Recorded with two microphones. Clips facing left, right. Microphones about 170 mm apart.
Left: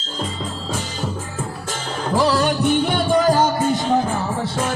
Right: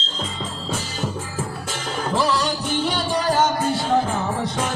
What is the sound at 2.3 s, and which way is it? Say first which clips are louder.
Music: left 5 dB; 60° left (ahead or behind).